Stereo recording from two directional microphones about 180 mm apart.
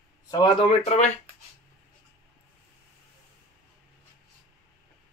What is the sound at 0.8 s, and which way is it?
Speech, 40° left (ahead or behind).